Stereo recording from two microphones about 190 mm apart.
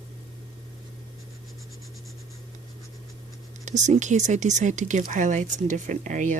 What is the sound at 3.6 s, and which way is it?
Speech, 40° right (ahead or behind).